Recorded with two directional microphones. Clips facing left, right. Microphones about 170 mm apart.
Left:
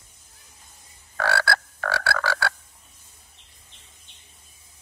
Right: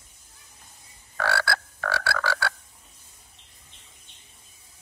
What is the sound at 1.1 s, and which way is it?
Frog, 45° left (ahead or behind).